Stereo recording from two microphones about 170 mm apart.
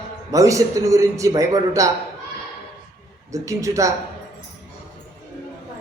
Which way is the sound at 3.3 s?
20° right (ahead or behind).